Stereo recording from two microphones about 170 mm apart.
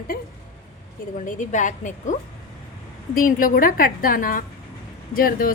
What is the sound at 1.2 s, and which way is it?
Speech, 50° left (ahead or behind).